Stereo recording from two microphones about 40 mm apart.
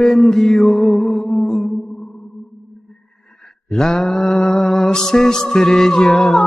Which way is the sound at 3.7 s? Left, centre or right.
Centre.